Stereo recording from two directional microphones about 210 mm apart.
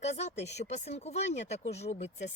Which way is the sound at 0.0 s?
35° left (ahead or behind).